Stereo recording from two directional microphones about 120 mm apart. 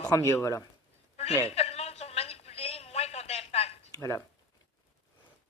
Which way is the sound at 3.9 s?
25° left (ahead or behind).